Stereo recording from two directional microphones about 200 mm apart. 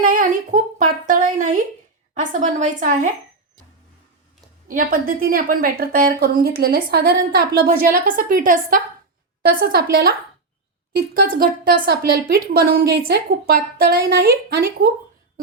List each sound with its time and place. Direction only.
0.0 s a woman's voice: 45° right (ahead or behind)
4.7 s a woman's voice: 45° right (ahead or behind)